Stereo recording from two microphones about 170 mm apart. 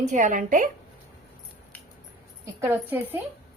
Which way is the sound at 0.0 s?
45° right (ahead or behind).